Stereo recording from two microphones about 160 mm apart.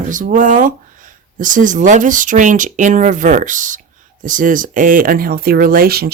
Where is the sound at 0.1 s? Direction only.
55° right (ahead or behind).